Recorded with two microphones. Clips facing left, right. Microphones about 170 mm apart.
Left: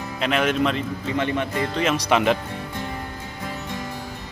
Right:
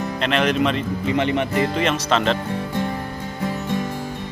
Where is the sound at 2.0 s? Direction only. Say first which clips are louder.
Even; 10° left (ahead or behind).